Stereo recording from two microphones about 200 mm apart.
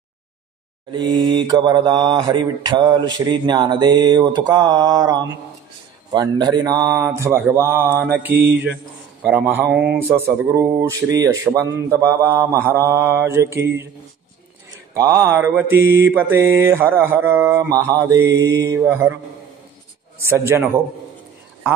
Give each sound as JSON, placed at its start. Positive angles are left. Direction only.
{"t": 0.9, "sound": "mantra", "side_deg": -20}
{"t": 9.2, "sound": "mantra", "side_deg": -10}
{"t": 15.0, "sound": "mantra", "side_deg": -15}
{"t": 20.2, "sound": "mantra", "side_deg": -15}